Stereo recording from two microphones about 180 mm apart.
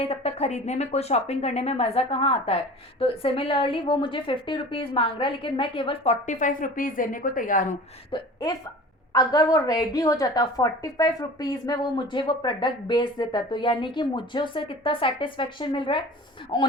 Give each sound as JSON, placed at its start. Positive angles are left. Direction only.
{"t": 0.0, "sound": "a woman's voice", "side_deg": 35}
{"t": 8.1, "sound": "a woman's voice", "side_deg": 25}